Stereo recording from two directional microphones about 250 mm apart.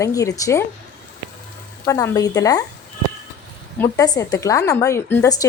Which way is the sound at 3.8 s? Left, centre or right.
Centre.